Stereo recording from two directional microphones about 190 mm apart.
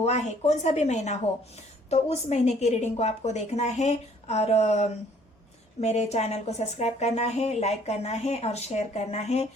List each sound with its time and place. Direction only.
0.0 s speech: 35° left (ahead or behind)